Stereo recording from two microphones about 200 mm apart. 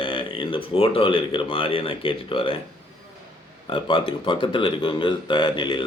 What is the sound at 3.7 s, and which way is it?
Speech, 25° left (ahead or behind).